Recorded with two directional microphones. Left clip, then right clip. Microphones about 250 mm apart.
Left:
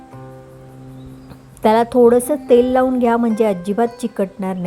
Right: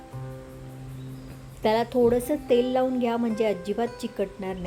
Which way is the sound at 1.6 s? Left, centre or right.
Left.